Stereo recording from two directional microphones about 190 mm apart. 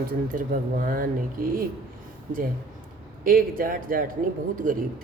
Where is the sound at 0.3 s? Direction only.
45° right (ahead or behind).